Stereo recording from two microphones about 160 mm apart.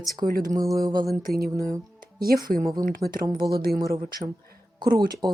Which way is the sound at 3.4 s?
75° right (ahead or behind).